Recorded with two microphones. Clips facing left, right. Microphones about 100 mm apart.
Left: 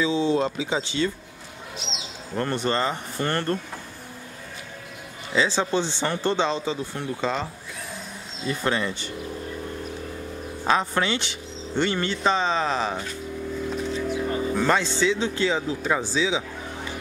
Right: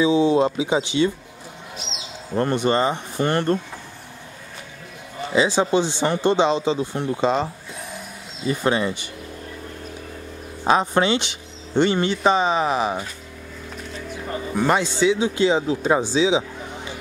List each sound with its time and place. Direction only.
0.0 s speech: 15° right (ahead or behind)
2.3 s speech: 15° right (ahead or behind)
5.3 s speech: 15° right (ahead or behind)
8.5 s speech: 15° right (ahead or behind)
10.6 s speech: 20° right (ahead or behind)
14.5 s speech: 15° right (ahead or behind)